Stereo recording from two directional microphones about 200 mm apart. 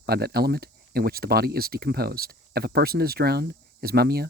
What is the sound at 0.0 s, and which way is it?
Speech, 50° right (ahead or behind).